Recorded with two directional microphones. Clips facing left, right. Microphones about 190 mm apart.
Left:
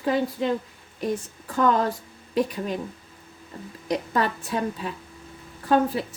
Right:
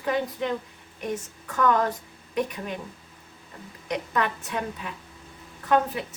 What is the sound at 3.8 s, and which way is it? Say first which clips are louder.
A woman's voice: left 3 dB; 35° left (ahead or behind).